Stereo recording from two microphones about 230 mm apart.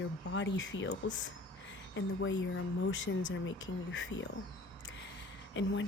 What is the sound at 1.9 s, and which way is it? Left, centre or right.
Speech, left.